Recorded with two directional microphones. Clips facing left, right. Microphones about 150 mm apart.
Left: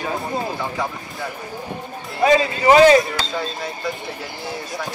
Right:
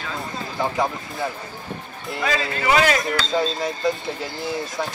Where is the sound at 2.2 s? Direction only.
20° left (ahead or behind).